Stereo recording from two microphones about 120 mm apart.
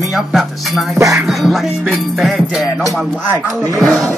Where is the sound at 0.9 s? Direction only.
25° right (ahead or behind).